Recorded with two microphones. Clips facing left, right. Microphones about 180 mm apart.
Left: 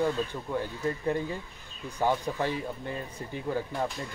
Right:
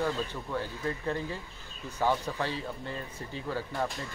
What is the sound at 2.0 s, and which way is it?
Speech, 15° left (ahead or behind).